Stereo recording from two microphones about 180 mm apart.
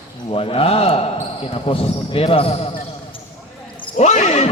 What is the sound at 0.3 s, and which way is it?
Speech, 30° left (ahead or behind).